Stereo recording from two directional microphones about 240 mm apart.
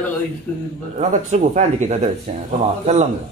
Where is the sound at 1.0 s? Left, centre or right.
Right.